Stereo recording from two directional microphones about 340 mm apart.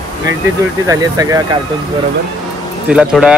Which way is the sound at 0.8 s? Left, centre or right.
Centre.